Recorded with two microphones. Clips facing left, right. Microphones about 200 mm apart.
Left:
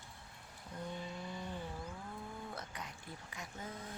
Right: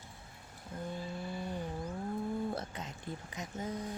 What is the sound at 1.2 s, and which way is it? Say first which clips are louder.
Vehicle: right 5 dB; 10° right (ahead or behind).